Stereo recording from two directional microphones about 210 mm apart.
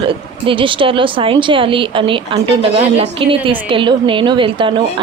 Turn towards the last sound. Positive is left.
turn(degrees=-25)  # may be behind; listen again after turning